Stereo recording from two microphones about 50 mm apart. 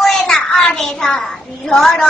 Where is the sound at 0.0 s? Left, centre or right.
Centre.